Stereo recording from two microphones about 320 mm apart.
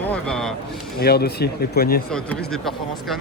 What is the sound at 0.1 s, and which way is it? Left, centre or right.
Vehicle, centre.